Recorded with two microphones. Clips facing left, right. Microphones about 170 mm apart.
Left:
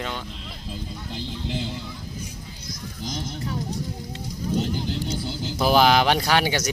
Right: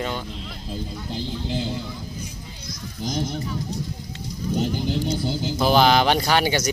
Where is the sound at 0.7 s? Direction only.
40° right (ahead or behind).